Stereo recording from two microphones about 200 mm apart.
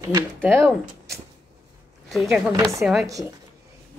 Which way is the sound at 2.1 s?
Centre (ahead or behind).